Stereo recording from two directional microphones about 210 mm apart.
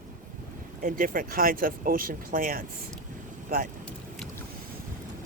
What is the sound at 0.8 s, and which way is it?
Speech, 40° right (ahead or behind).